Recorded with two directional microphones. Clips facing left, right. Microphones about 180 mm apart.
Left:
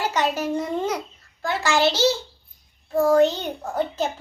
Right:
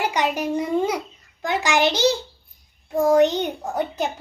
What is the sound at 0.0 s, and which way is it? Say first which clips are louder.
A child's voice: right 1 dB; 15° right (ahead or behind).